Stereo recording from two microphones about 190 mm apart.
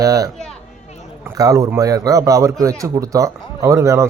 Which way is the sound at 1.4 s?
15° right (ahead or behind).